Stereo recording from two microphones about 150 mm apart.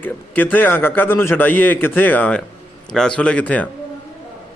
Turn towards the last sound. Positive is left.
turn(degrees=10)  # may be behind; listen again after turning